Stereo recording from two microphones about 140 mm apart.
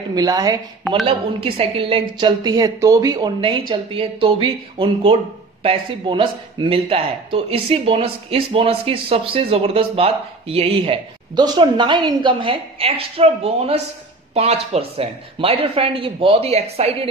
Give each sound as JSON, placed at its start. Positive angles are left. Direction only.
{"t": 0.1, "sound": "speech", "side_deg": -25}
{"t": 1.0, "sound": "speech", "side_deg": -40}
{"t": 3.3, "sound": "speech", "side_deg": -40}
{"t": 11.3, "sound": "speech", "side_deg": -30}